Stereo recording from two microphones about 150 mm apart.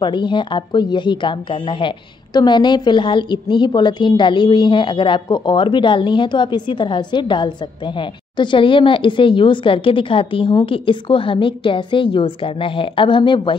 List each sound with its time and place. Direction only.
0.0 s speech: 30° left (ahead or behind)